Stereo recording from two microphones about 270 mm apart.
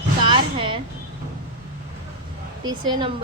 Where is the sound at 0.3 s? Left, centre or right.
Centre.